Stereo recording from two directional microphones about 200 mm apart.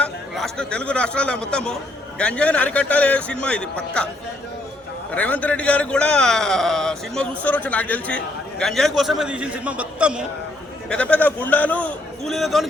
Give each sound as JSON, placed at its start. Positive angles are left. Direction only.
{"t": 0.0, "sound": "a man's voice", "side_deg": 5}
{"t": 5.1, "sound": "a man's voice", "side_deg": 5}
{"t": 10.8, "sound": "a man's voice", "side_deg": 5}